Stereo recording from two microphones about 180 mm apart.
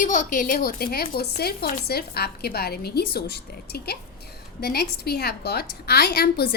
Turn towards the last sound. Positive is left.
turn(degrees=60)  # may be behind; listen again after turning